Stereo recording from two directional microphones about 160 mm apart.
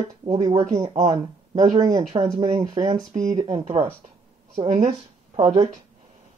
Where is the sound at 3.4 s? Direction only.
35° right (ahead or behind).